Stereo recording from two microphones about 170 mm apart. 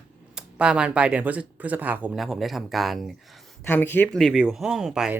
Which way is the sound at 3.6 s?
10° left (ahead or behind).